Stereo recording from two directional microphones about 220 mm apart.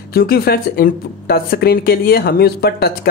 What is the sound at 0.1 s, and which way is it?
Speech, 45° left (ahead or behind).